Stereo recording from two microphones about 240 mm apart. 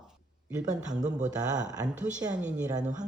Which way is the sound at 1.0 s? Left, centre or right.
Right.